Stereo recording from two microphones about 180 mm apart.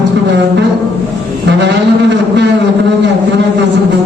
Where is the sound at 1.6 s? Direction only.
75° right (ahead or behind).